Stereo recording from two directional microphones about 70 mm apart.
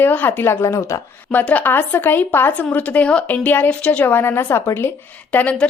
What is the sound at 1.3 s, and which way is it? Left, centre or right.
A woman's voice, left.